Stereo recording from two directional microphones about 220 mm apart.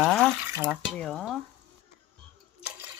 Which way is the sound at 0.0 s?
Centre (ahead or behind).